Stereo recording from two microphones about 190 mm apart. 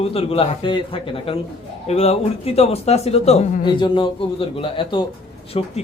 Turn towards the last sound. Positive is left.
turn(degrees=30)  # may be behind; listen again after turning